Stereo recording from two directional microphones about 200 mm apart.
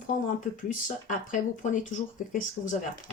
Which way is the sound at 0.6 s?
40° left (ahead or behind).